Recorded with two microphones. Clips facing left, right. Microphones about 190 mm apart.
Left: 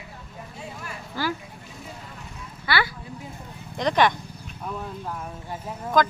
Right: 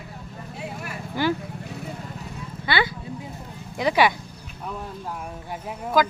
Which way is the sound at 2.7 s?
20° right (ahead or behind).